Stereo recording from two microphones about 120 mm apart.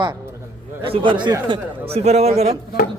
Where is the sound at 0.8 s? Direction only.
45° right (ahead or behind).